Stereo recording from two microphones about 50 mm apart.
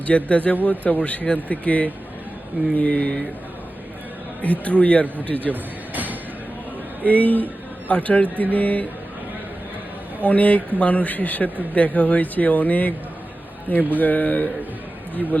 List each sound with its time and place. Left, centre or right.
0.3 s speech: left
4.6 s speech: left
5.9 s music: right
7.0 s speech: left
10.2 s speech: left